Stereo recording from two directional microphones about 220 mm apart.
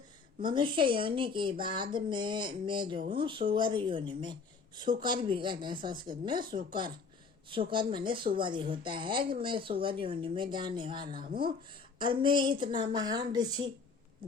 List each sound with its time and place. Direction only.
0.4 s speech: 20° right (ahead or behind)